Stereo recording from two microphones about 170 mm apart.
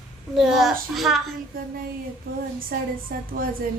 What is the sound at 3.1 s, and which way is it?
Speech, 65° right (ahead or behind).